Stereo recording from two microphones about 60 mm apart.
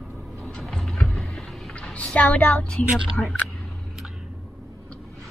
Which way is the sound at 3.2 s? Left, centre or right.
Centre.